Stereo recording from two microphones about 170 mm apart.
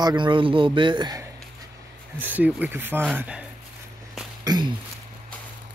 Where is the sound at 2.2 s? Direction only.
10° right (ahead or behind).